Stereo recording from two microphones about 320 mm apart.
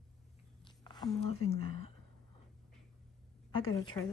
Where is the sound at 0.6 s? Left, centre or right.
Centre.